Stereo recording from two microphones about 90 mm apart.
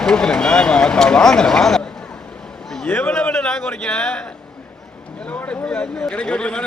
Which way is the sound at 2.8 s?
20° left (ahead or behind).